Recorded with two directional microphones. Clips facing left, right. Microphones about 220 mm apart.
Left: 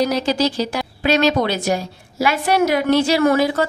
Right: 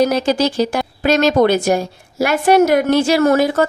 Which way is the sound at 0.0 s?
50° right (ahead or behind).